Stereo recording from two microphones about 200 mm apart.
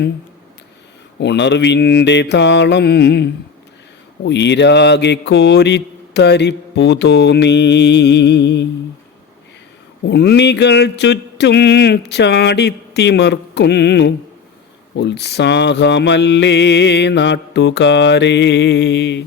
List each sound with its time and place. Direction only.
1.2 s mantra: 60° left (ahead or behind)
10.1 s mantra: 60° left (ahead or behind)